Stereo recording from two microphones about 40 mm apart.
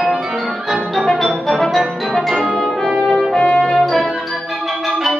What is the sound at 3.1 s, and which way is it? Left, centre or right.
Music, left.